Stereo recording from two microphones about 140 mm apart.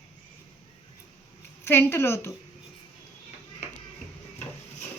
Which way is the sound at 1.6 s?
15° left (ahead or behind).